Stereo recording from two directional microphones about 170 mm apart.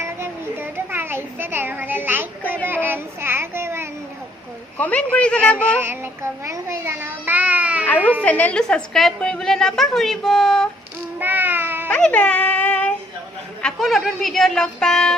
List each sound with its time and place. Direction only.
0.0 s a sound: 15° right (ahead or behind)
2.4 s speech: 10° left (ahead or behind)
2.6 s child singing: 10° right (ahead or behind)
4.8 s a woman's voice: 10° left (ahead or behind)
5.8 s a child's voice: 15° right (ahead or behind)
7.9 s a woman's voice: 10° left (ahead or behind)
11.2 s a sound: 10° right (ahead or behind)
11.9 s music: 5° left (ahead or behind)
13.6 s a woman's voice: 5° left (ahead or behind)